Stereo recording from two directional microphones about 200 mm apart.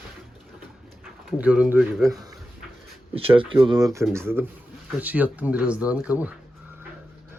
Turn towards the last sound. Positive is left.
turn(degrees=-5)  # may be behind; listen again after turning